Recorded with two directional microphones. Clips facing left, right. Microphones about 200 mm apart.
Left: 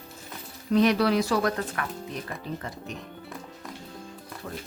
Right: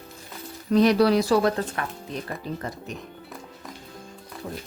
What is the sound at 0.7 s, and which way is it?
Speech, 35° right (ahead or behind).